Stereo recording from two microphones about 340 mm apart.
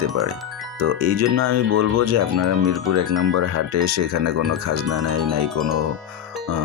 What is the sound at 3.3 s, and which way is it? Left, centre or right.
Speech, right.